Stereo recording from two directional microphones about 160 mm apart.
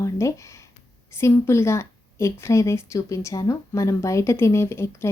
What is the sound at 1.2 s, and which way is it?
A woman's voice, 15° left (ahead or behind).